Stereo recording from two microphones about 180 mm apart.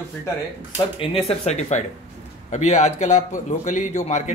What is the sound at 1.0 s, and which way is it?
A man's voice, 35° left (ahead or behind).